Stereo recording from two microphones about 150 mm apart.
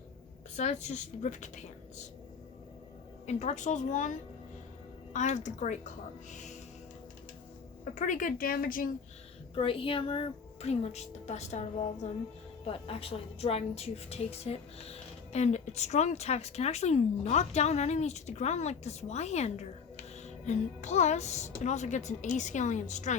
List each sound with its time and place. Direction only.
0.5 s a woman's voice: 50° left (ahead or behind)
3.2 s a woman's voice: 50° left (ahead or behind)
6.3 s music: 55° left (ahead or behind)
7.9 s a woman's voice: 60° left (ahead or behind)
9.6 s a woman's voice: 40° left (ahead or behind)